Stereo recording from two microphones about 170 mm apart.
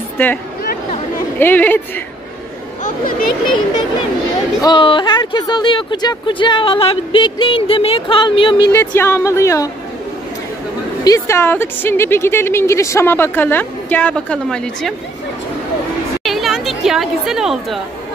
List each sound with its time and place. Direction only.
1.4 s a woman's voice: 10° left (ahead or behind)
2.8 s speech: 55° left (ahead or behind)
4.6 s speech: 25° left (ahead or behind)
8.7 s a woman's voice: 15° left (ahead or behind)
11.1 s a woman's voice: 15° left (ahead or behind)
16.3 s a woman's voice: centre (ahead or behind)